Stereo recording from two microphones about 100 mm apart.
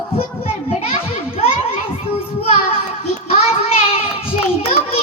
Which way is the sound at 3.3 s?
75° left (ahead or behind).